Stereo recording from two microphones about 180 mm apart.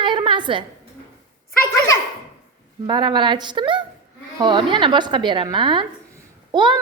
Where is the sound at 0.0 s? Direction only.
25° right (ahead or behind).